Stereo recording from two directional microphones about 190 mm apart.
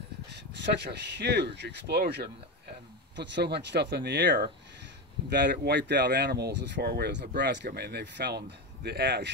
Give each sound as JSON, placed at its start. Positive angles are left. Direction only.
{"t": 0.3, "sound": "speech", "side_deg": -65}